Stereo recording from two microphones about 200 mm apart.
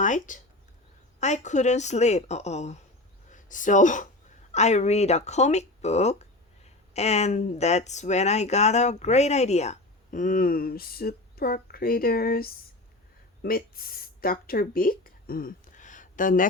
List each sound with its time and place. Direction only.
0.0 s speech: 40° left (ahead or behind)